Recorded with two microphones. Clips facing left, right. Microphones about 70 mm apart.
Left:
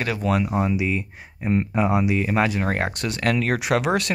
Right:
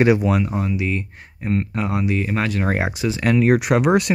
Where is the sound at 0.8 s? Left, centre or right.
Centre.